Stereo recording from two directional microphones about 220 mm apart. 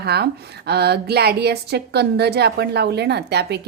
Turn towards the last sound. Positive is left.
turn(degrees=-50)  # may be behind; listen again after turning